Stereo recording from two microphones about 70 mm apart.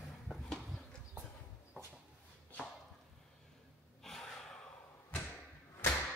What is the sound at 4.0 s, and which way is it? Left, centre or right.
Gasp, centre.